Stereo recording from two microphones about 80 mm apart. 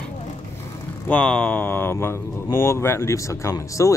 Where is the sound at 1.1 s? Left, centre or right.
Centre.